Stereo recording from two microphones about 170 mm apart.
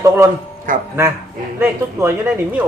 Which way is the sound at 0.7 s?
50° right (ahead or behind).